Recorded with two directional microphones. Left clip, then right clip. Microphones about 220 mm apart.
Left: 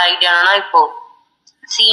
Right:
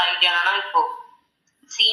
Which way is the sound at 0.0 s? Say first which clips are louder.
Left 7 dB; 40° left (ahead or behind).